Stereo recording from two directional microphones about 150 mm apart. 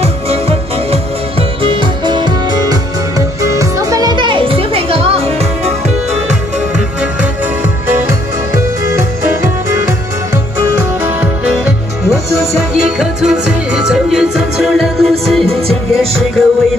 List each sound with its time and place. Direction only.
0.0 s music: 45° right (ahead or behind)
1.6 s music: 35° right (ahead or behind)
11.1 s music: 10° right (ahead or behind)